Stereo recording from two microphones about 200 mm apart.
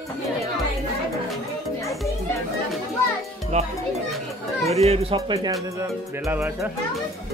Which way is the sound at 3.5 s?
35° right (ahead or behind).